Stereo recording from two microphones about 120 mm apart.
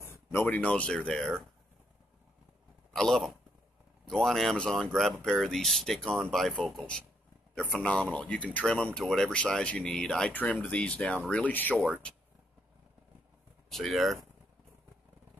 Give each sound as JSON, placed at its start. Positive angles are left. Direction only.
{"t": 0.0, "sound": "speech", "side_deg": 20}
{"t": 2.9, "sound": "a man's voice", "side_deg": 5}
{"t": 13.7, "sound": "speech", "side_deg": 0}